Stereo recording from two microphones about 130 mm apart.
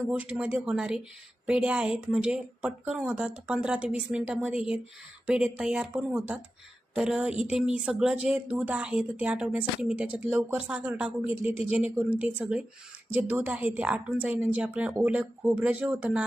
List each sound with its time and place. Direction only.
0.1 s speech: 5° right (ahead or behind)